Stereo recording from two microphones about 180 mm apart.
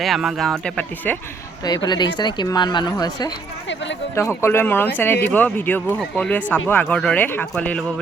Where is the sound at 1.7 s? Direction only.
25° left (ahead or behind).